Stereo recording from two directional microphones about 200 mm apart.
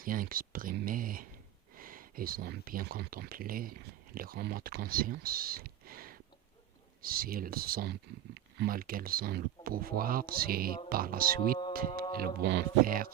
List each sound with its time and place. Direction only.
0.0 s speech: 45° right (ahead or behind)